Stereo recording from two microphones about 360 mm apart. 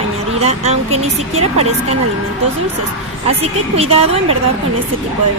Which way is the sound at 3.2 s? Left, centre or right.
Centre.